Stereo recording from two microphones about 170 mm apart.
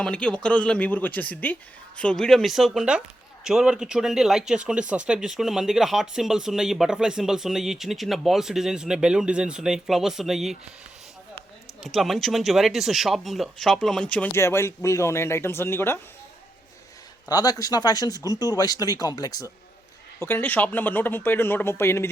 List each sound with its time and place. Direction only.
0.0 s speech: 5° left (ahead or behind)
11.8 s speech: centre (ahead or behind); by 16.0 s 15° left (ahead or behind)
17.2 s speech: 25° left (ahead or behind)